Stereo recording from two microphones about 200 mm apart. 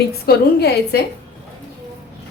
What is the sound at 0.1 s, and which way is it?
Speech, 50° left (ahead or behind).